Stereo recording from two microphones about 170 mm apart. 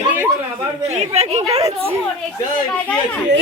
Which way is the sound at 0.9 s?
40° right (ahead or behind).